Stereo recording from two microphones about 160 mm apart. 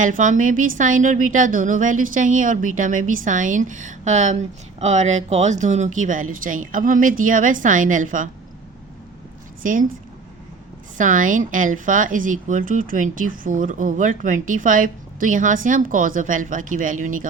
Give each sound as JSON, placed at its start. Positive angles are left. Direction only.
{"t": 0.0, "sound": "a woman's voice", "side_deg": -55}
{"t": 9.6, "sound": "speech", "side_deg": -55}
{"t": 10.9, "sound": "speech", "side_deg": -55}